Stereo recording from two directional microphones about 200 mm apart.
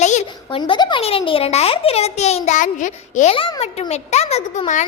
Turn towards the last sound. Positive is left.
turn(degrees=35)  # may be behind; listen again after turning